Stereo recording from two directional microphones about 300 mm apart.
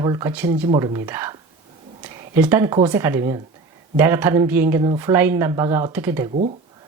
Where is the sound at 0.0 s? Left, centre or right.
Centre.